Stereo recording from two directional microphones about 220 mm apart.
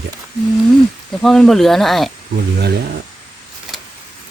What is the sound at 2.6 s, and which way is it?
Speech, 45° right (ahead or behind).